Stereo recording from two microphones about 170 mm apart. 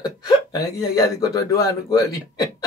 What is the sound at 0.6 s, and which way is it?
A man's voice, 20° left (ahead or behind).